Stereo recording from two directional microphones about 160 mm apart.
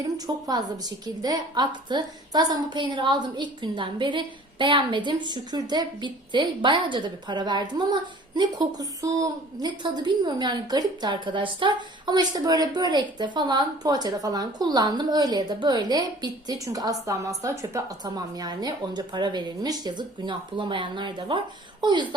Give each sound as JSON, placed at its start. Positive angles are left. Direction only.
{"t": 0.0, "sound": "a woman's voice", "side_deg": -25}